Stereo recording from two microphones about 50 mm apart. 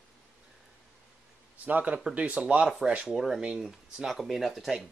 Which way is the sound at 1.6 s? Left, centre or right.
Right.